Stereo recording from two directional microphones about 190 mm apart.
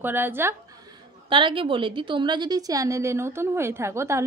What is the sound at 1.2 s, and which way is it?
A woman's voice, 25° right (ahead or behind).